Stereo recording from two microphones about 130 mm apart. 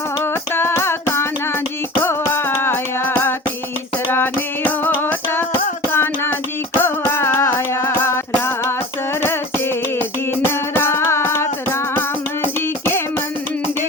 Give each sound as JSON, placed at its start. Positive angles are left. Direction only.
{"t": 0.5, "sound": "a sound", "side_deg": 20}
{"t": 2.0, "sound": "music", "side_deg": 15}
{"t": 10.4, "sound": "music", "side_deg": 20}